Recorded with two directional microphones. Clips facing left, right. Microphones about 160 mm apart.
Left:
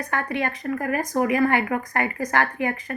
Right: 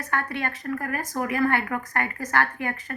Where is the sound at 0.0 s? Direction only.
15° left (ahead or behind).